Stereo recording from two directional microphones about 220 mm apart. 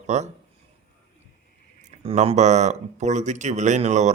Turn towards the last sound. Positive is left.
turn(degrees=-30)  # may be behind; listen again after turning